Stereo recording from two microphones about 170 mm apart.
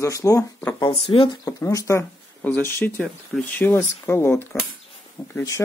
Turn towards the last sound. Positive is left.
turn(degrees=15)  # may be behind; listen again after turning